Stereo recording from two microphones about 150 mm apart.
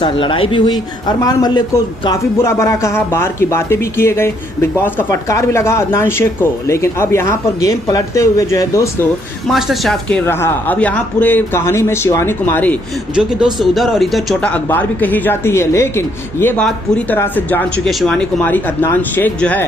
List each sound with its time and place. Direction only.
0.0 s speech: 35° left (ahead or behind)
9.5 s speech: centre (ahead or behind)
10.2 s speech: 15° left (ahead or behind)
13.1 s speech: centre (ahead or behind)
14.5 s speech: 10° left (ahead or behind)